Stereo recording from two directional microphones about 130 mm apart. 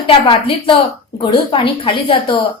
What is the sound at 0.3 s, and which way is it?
A woman's voice, 45° left (ahead or behind).